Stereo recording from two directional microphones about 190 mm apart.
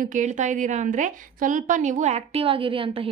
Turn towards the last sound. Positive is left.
turn(degrees=-30)  # may be behind; listen again after turning